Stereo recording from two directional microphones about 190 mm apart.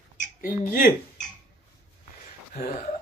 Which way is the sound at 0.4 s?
50° left (ahead or behind).